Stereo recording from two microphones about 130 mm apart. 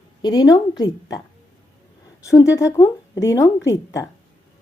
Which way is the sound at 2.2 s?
25° left (ahead or behind).